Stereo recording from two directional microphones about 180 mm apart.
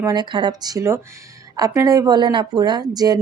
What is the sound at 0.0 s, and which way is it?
Speech, 20° right (ahead or behind).